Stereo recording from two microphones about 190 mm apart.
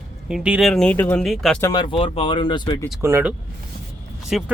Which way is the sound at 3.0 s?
15° right (ahead or behind).